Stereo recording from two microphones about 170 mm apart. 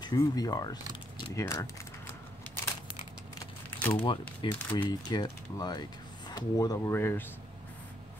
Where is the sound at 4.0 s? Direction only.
30° left (ahead or behind); by 7.2 s 15° left (ahead or behind).